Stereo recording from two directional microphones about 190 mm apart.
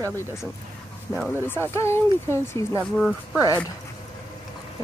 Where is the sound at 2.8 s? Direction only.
Centre (ahead or behind).